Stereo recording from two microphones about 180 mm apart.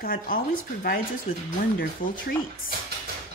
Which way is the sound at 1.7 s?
50° left (ahead or behind).